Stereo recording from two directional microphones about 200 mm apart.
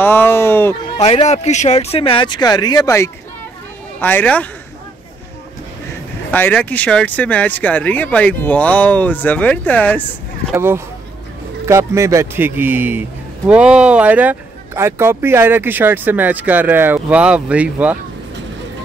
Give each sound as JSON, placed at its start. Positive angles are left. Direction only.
{"t": 0.0, "sound": "speech", "side_deg": 10}
{"t": 0.9, "sound": "speech", "side_deg": 35}
{"t": 6.3, "sound": "speech", "side_deg": 10}
{"t": 10.5, "sound": "speech", "side_deg": -10}